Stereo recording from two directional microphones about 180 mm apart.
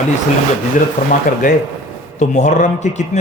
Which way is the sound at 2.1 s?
40° left (ahead or behind).